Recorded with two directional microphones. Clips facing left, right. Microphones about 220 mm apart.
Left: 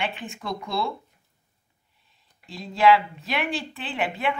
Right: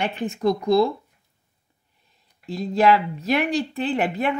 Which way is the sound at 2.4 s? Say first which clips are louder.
Right 2 dB; 40° right (ahead or behind).